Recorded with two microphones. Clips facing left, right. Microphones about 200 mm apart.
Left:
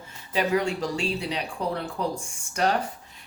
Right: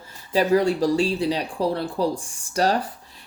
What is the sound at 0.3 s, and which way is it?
Speech, 35° right (ahead or behind).